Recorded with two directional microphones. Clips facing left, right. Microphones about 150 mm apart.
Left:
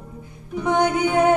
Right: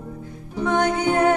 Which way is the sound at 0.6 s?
15° left (ahead or behind).